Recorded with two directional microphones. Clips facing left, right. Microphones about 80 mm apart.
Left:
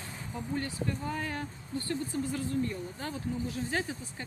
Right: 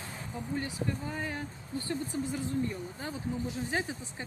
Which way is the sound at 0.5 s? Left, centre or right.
Centre.